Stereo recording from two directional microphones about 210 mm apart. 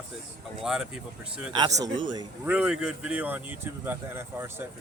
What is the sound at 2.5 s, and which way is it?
Speech, 5° right (ahead or behind).